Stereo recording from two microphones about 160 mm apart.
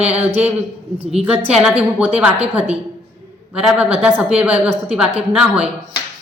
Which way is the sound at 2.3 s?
40° right (ahead or behind).